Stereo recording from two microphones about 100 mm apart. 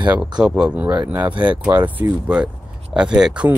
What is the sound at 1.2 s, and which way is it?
Speech, 55° right (ahead or behind).